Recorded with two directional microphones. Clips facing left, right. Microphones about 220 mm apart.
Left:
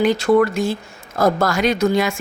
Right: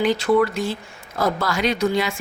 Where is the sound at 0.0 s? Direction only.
45° left (ahead or behind).